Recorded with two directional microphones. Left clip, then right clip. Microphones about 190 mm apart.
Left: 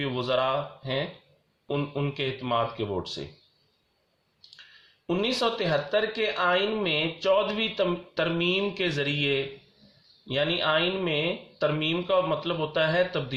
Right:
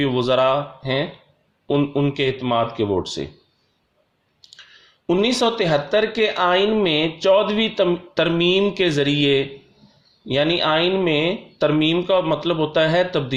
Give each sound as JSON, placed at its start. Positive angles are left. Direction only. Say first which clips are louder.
{"t": 0.0, "sound": "speech", "louder": "right 9 dB", "side_deg": -40}
{"t": 5.0, "sound": "speech", "louder": "right 8 dB", "side_deg": -40}